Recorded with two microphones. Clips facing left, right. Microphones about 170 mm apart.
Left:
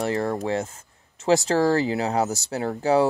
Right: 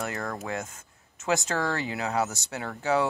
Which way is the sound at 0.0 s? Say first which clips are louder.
Left 8 dB; 30° left (ahead or behind).